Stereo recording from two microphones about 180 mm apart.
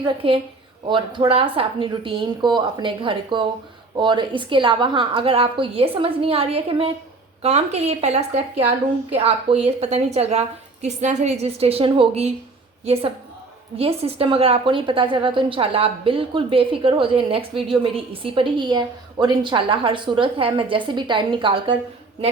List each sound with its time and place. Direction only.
0.2 s a woman's voice: 30° right (ahead or behind)